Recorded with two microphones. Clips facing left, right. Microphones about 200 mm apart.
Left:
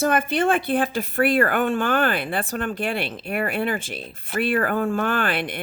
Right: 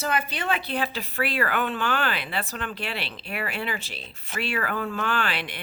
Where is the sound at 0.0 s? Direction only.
50° left (ahead or behind).